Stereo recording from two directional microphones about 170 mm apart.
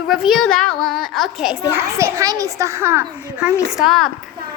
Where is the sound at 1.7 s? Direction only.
15° right (ahead or behind); by 4.1 s centre (ahead or behind).